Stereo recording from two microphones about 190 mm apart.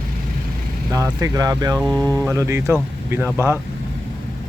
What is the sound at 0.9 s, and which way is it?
Speech, 15° right (ahead or behind).